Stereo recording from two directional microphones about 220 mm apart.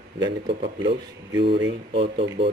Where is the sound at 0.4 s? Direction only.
25° right (ahead or behind).